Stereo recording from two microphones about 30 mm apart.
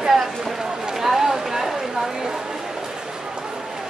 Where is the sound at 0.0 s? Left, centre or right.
Centre.